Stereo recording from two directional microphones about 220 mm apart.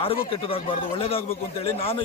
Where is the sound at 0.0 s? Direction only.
25° left (ahead or behind).